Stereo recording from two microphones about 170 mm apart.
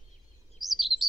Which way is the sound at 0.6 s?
Centre (ahead or behind).